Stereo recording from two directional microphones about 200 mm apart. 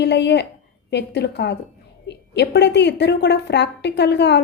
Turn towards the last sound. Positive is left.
turn(degrees=60)  # may be behind; listen again after turning